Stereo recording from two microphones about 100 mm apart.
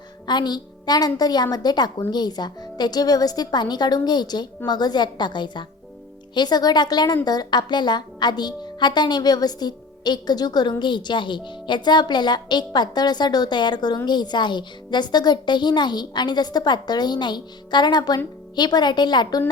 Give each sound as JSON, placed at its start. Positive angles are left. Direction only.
{"t": 0.3, "sound": "a woman's voice", "side_deg": 45}